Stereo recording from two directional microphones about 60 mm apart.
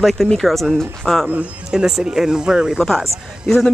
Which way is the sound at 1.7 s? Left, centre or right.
Centre.